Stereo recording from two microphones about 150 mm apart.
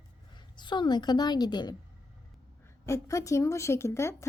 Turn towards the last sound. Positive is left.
turn(degrees=20)  # may be behind; listen again after turning